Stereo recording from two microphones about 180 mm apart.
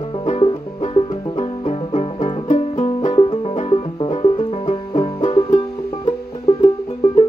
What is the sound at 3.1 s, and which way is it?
Music, 30° left (ahead or behind).